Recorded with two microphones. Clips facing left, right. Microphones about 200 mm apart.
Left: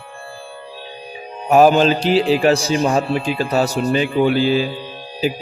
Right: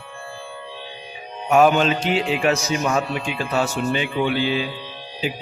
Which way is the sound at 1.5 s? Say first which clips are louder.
Left 4 dB; 35° left (ahead or behind).